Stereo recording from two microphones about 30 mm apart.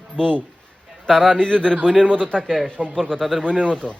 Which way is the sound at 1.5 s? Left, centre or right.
Left.